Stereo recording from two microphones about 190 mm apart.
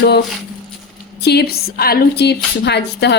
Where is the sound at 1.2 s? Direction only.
60° left (ahead or behind).